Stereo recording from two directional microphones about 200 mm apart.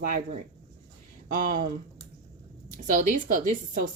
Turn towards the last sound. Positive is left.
turn(degrees=-40)  # may be behind; listen again after turning